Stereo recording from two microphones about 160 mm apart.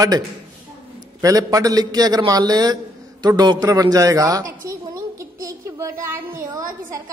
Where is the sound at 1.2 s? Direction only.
20° right (ahead or behind).